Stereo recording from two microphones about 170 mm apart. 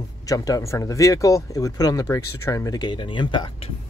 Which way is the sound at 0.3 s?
20° left (ahead or behind).